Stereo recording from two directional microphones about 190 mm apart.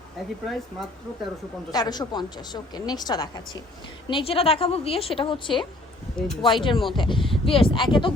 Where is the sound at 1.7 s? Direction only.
20° left (ahead or behind).